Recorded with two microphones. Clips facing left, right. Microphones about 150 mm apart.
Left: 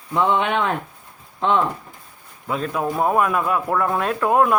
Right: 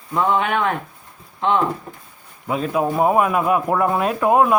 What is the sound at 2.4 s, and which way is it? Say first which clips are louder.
A man's voice: right 3 dB; 10° right (ahead or behind).